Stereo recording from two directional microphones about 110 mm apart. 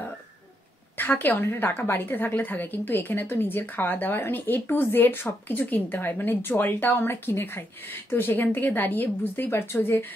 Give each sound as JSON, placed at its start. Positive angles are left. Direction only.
{"t": 0.9, "sound": "a woman's voice", "side_deg": 15}